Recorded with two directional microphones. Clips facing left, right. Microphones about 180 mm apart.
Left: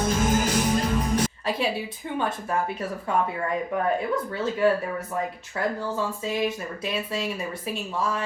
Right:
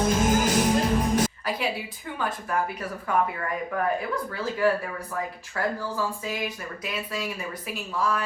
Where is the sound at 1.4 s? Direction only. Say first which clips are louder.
Left 2 dB; 25° left (ahead or behind).